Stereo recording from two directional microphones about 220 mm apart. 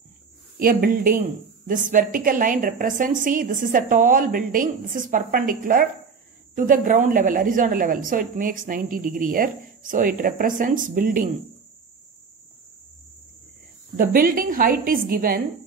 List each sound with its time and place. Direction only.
0.6 s a woman's voice: 40° right (ahead or behind)
13.9 s a woman's voice: 40° right (ahead or behind)